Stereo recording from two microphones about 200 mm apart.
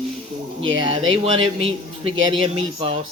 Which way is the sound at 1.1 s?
30° right (ahead or behind).